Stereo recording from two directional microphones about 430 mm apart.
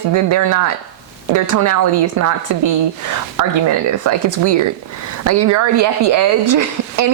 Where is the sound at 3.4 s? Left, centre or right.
Right.